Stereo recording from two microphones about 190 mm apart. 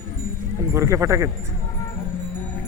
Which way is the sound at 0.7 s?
15° right (ahead or behind).